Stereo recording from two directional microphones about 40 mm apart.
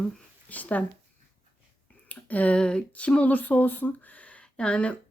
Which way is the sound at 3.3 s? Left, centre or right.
Left.